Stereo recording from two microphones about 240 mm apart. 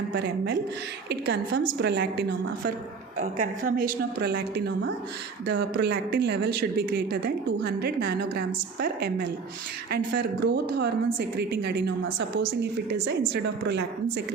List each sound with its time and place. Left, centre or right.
0.1 s speech: right
3.2 s a woman's voice: right